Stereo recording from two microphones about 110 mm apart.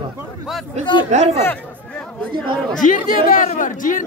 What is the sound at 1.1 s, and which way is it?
Speech, 90° right.